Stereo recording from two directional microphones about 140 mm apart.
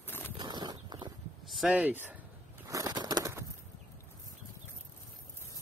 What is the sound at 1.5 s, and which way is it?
Speech, 5° right (ahead or behind).